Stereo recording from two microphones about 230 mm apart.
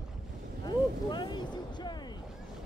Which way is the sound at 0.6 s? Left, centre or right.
Centre.